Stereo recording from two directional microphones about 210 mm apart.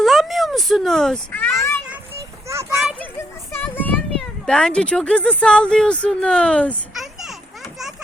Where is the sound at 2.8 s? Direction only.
Centre (ahead or behind).